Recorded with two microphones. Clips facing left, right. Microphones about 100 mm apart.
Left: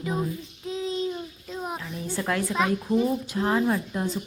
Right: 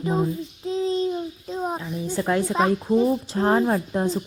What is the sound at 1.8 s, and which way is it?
A woman's voice, 25° right (ahead or behind).